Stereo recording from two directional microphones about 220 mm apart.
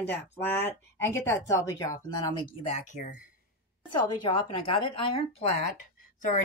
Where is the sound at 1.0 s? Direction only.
10° left (ahead or behind).